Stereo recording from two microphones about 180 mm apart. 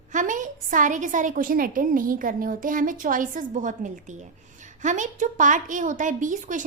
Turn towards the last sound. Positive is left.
turn(degrees=-45)  # may be behind; listen again after turning